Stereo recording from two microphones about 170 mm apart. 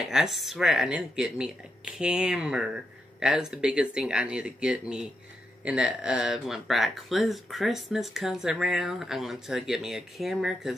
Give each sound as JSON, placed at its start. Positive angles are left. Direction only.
{"t": 0.0, "sound": "speech", "side_deg": -5}